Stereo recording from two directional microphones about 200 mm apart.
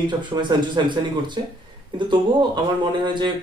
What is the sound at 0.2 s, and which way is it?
A man's voice, 25° right (ahead or behind).